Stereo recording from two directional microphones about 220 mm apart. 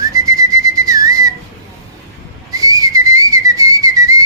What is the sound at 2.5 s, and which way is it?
Whistling, 15° right (ahead or behind).